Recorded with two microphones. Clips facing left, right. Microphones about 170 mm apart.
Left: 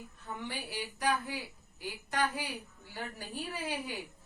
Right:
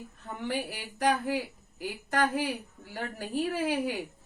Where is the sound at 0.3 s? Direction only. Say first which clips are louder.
Right 7 dB; 50° right (ahead or behind).